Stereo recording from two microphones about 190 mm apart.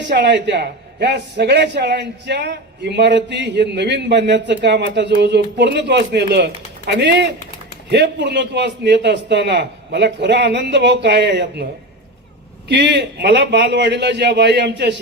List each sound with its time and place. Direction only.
0.1 s a man's voice: 65° right (ahead or behind)
12.6 s a man's voice: 65° right (ahead or behind)